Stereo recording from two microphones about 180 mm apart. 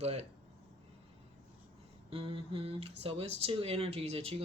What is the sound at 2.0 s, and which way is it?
Speech, 30° right (ahead or behind).